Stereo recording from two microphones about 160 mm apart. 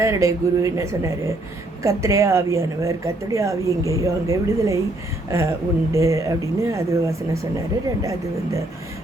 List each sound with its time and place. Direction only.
0.0 s a woman's voice: 20° right (ahead or behind)